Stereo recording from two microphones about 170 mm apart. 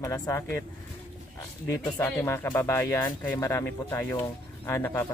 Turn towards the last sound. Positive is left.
turn(degrees=15)  # may be behind; listen again after turning